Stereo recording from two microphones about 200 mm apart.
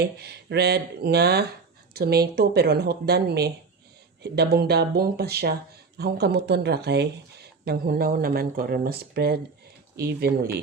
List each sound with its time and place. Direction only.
0.0 s speech: 55° right (ahead or behind)